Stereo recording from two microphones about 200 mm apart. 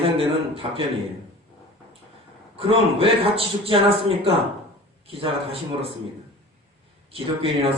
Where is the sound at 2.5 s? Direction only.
30° right (ahead or behind).